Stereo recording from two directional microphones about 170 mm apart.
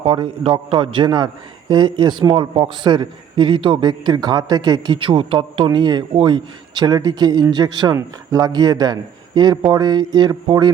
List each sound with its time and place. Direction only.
0.0 s a man's voice: 35° right (ahead or behind)